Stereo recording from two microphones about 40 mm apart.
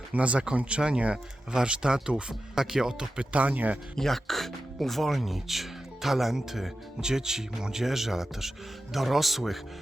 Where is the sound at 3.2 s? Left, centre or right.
Right.